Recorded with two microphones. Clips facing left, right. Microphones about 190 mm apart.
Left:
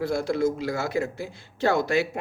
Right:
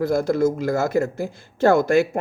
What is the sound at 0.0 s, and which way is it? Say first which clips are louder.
A man's voice: right 5 dB; 45° right (ahead or behind).